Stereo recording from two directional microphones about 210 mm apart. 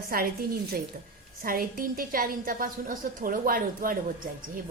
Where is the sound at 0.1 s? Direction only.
45° right (ahead or behind).